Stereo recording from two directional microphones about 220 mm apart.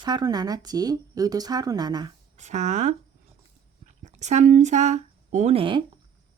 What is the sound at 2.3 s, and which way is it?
Speech, 30° right (ahead or behind).